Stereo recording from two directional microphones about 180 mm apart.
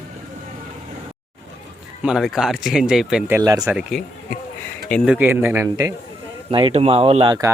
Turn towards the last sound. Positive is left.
turn(degrees=-35)  # may be behind; listen again after turning